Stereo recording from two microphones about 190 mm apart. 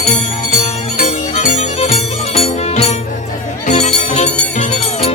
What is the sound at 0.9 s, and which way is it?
Music, 35° left (ahead or behind).